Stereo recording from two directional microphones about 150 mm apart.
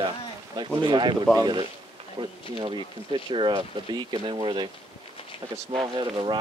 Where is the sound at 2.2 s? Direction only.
35° right (ahead or behind).